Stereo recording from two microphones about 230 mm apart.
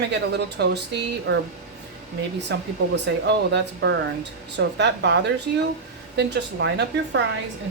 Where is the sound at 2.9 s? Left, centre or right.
Right.